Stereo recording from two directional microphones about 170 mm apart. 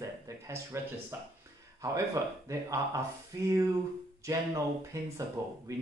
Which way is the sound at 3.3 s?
20° right (ahead or behind).